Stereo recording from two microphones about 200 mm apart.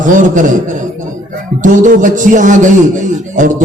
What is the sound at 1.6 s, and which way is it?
A man's voice, 40° right (ahead or behind).